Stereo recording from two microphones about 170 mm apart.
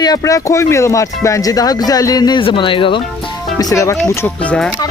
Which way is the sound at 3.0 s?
Centre (ahead or behind).